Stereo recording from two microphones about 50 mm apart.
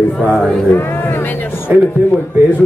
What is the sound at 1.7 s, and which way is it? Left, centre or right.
Speech, right.